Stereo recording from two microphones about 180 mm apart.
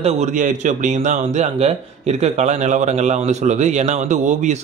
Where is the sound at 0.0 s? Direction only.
45° right (ahead or behind).